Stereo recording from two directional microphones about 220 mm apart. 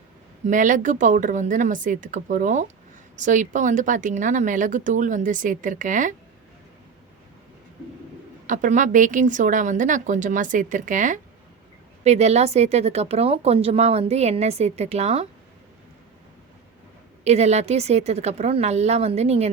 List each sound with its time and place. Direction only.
0.4 s speech: 35° right (ahead or behind)
8.4 s speech: 35° right (ahead or behind)
17.2 s speech: 30° right (ahead or behind)